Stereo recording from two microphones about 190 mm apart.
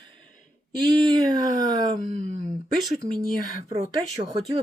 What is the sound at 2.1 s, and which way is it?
Speech, 40° right (ahead or behind).